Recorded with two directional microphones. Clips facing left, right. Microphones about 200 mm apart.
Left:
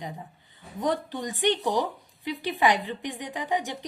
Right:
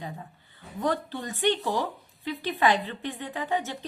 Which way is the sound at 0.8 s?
15° left (ahead or behind).